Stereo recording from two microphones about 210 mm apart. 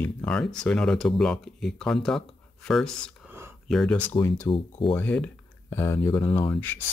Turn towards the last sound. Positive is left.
turn(degrees=10)  # may be behind; listen again after turning